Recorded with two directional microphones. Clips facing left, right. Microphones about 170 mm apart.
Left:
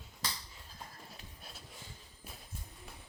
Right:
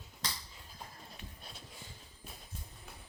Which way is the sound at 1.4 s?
5° left (ahead or behind).